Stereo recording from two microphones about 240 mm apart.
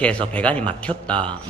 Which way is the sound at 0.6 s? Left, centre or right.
Centre.